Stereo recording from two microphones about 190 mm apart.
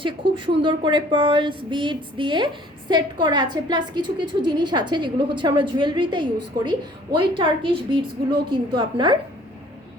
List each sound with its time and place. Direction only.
0.0 s a woman's voice: 25° right (ahead or behind)